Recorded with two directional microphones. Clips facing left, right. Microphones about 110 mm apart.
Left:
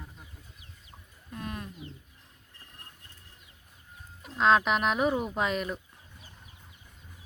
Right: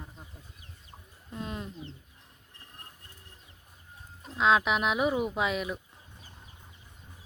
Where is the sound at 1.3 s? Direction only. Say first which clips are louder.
Right 1 dB; 20° right (ahead or behind).